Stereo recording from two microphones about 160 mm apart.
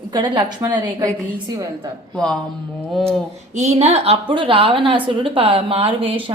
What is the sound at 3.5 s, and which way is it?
A woman's voice, 45° right (ahead or behind).